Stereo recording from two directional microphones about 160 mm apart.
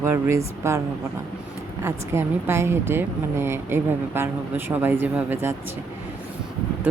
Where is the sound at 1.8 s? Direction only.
15° right (ahead or behind).